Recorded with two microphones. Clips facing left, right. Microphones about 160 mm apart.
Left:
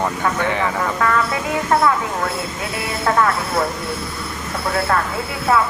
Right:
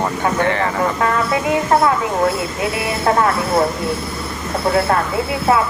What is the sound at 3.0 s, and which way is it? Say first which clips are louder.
Speech: right 2 dB; 25° right (ahead or behind).